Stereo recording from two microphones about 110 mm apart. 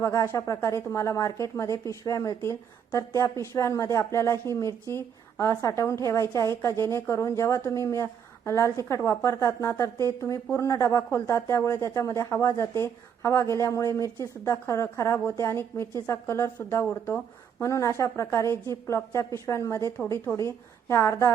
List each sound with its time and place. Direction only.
0.0 s speech: 30° left (ahead or behind)